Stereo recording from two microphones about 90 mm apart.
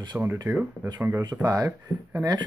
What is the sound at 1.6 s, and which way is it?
Speech, 40° right (ahead or behind).